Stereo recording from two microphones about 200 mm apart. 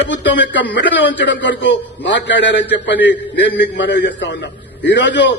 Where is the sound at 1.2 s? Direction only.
65° left (ahead or behind).